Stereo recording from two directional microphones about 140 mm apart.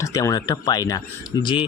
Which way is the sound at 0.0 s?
25° left (ahead or behind).